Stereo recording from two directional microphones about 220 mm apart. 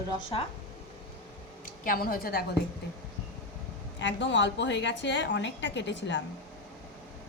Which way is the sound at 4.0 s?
55° left (ahead or behind).